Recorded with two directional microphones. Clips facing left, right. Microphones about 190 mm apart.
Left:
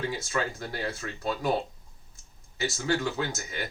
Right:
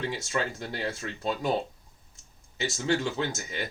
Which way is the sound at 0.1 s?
20° right (ahead or behind).